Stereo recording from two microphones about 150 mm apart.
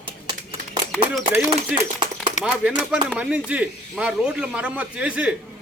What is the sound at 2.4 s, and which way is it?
A man's voice, 5° right (ahead or behind).